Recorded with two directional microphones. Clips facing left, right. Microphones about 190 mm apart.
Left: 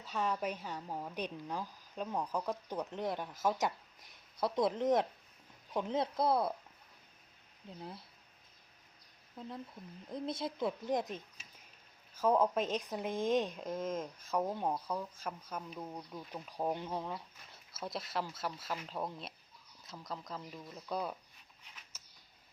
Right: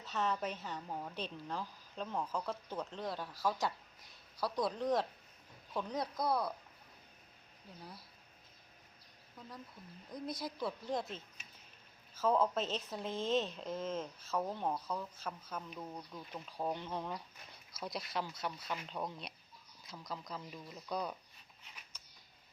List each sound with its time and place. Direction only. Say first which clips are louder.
0.0 s a woman's voice: left 1 dB; 10° left (ahead or behind)
7.6 s speech: left 5 dB; 25° left (ahead or behind)
10.1 s a woman's voice: left 3 dB; 25° left (ahead or behind); by 21.2 s 5° left (ahead or behind)
21.9 s a sound: even; 5° left (ahead or behind)